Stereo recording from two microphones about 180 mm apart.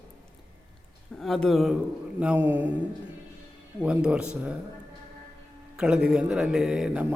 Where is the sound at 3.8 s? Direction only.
5° right (ahead or behind).